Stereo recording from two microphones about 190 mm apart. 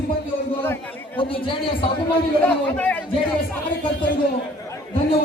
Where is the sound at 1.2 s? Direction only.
25° left (ahead or behind).